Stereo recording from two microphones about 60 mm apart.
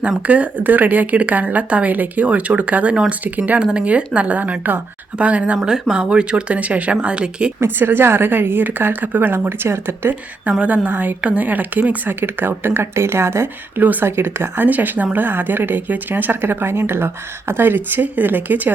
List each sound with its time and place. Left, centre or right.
0.2 s speech: right
3.6 s speech: centre
7.6 s a woman's voice: right
10.6 s a woman's voice: right
13.7 s speech: right
14.0 s a woman's voice: right